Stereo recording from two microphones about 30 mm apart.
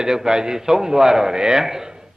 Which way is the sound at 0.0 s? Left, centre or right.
Right.